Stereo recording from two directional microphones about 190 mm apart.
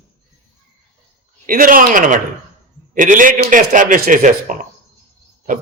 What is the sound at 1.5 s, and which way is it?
Speech, 50° right (ahead or behind).